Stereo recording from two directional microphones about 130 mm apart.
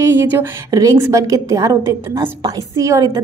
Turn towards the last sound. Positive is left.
turn(degrees=-25)  # may be behind; listen again after turning